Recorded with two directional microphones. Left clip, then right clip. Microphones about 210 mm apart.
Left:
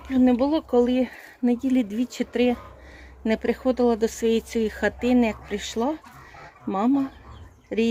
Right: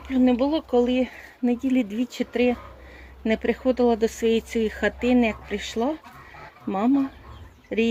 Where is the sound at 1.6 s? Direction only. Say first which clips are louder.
Even; 70° left (ahead or behind).